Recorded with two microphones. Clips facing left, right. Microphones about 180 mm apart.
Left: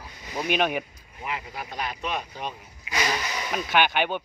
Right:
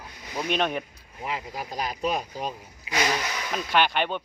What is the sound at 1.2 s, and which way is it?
Speech, 35° right (ahead or behind).